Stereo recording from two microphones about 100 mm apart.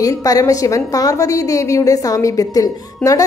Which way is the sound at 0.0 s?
35° left (ahead or behind).